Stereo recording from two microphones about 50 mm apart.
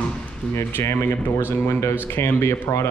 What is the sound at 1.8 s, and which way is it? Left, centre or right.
Speech, left.